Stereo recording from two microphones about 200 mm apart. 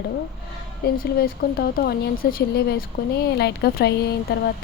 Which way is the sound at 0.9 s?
50° left (ahead or behind).